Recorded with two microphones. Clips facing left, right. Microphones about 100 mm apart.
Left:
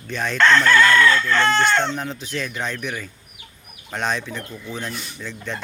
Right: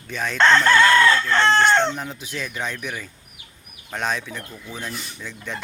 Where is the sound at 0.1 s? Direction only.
5° right (ahead or behind).